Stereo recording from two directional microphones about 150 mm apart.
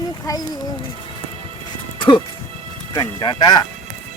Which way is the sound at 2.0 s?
35° left (ahead or behind).